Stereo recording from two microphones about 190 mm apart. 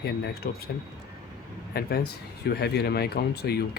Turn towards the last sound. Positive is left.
turn(degrees=55)  # may be behind; listen again after turning